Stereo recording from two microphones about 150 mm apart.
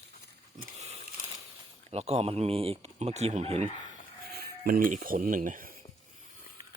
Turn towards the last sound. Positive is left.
turn(degrees=-65)  # may be behind; listen again after turning